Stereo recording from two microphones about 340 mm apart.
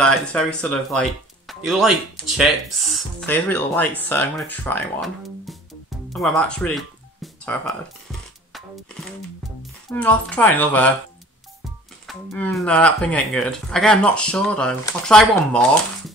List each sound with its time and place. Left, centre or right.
0.0 s speech: centre
9.8 s speech: centre
12.1 s speech: centre